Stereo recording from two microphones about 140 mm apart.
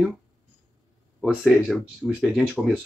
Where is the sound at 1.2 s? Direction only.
5° right (ahead or behind).